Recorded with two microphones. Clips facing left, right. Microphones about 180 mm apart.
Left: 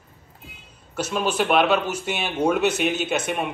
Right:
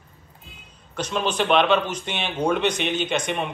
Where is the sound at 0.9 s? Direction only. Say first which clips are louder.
Left 1 dB; 5° left (ahead or behind).